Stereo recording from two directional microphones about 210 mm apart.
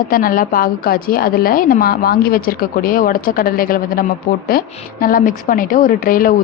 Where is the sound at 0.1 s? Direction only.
40° left (ahead or behind).